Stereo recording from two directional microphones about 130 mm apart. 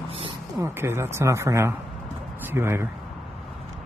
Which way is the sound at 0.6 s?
20° right (ahead or behind).